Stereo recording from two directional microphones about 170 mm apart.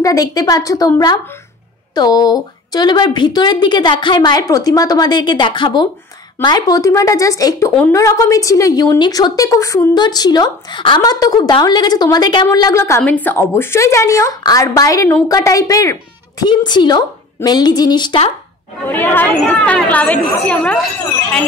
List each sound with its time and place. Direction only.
0.0 s a woman's voice: 20° left (ahead or behind)
18.9 s a woman's voice: 10° left (ahead or behind)